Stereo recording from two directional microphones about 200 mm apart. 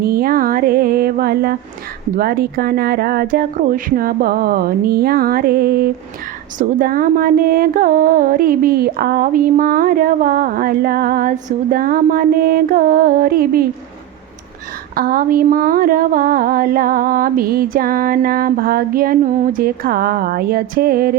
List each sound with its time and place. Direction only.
0.0 s mantra: 50° right (ahead or behind)
2.1 s speech: 50° right (ahead or behind)
14.9 s speech: 45° right (ahead or behind)